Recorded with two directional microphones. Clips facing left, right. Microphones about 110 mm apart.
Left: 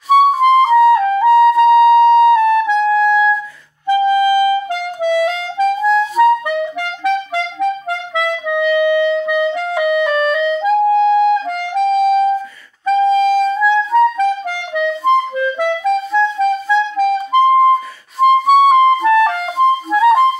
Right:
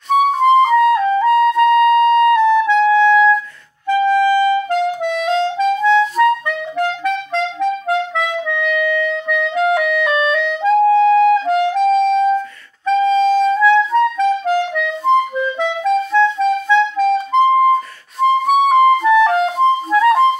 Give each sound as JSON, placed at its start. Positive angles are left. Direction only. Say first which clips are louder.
{"t": 0.1, "sound": "clarinet", "louder": "left 2 dB", "side_deg": 5}
{"t": 1.2, "sound": "music", "louder": "left 4 dB", "side_deg": 5}
{"t": 5.6, "sound": "clarinet", "louder": "left 3 dB", "side_deg": 0}
{"t": 8.2, "sound": "clarinet", "louder": "left 3 dB", "side_deg": 5}